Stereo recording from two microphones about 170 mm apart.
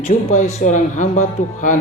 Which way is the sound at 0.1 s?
45° left (ahead or behind).